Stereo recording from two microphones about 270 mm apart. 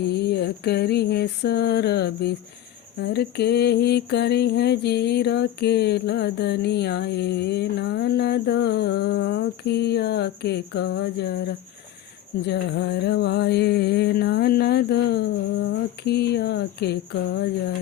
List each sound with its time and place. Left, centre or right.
0.1 s mantra: left